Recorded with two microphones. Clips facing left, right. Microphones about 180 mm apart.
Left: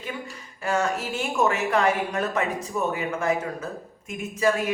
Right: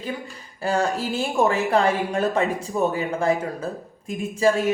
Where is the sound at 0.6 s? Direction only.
30° right (ahead or behind).